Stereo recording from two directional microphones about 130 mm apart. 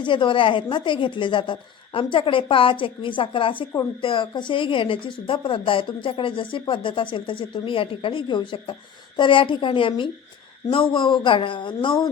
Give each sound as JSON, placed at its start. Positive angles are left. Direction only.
{"t": 0.0, "sound": "a woman's voice", "side_deg": 40}